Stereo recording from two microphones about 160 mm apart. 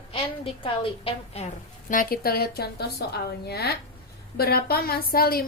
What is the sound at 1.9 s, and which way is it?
A woman's voice, 60° left (ahead or behind).